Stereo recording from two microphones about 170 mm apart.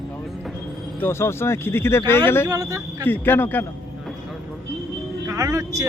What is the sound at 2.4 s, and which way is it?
Speech, 20° right (ahead or behind).